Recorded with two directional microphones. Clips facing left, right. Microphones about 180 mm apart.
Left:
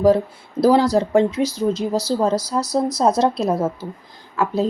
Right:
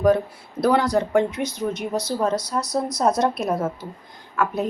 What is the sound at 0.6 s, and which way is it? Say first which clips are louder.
A woman's voice: left 4 dB; 30° left (ahead or behind).